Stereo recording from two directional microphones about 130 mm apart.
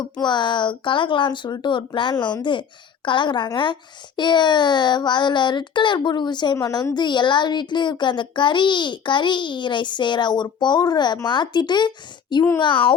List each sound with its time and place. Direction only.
0.0 s a child's voice: 35° left (ahead or behind)